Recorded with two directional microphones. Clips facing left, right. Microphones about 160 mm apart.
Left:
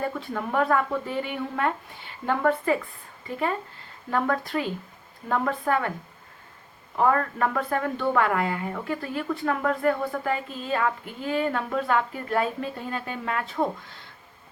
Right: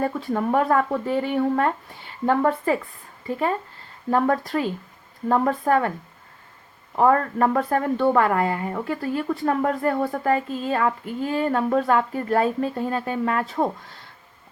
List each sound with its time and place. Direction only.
0.0 s speech: 40° right (ahead or behind)
4.1 s speech: 40° right (ahead or behind)
6.9 s speech: 35° right (ahead or behind)